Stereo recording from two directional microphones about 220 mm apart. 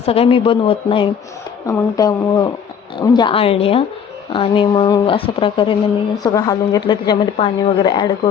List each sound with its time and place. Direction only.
0.0 s a woman's voice: 25° left (ahead or behind)